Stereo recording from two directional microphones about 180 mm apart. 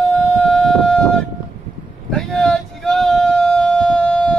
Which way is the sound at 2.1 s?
5° left (ahead or behind).